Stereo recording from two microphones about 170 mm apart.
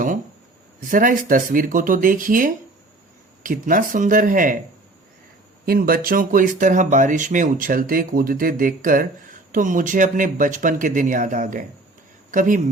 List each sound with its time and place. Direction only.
0.9 s speech: 55° right (ahead or behind)
5.6 s speech: 60° right (ahead or behind)